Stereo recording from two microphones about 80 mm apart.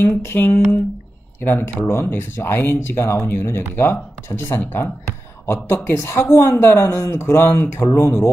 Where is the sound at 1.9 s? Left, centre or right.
Left.